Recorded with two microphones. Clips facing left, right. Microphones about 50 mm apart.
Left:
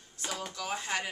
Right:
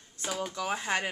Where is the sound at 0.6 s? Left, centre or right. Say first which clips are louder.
Right 3 dB; centre.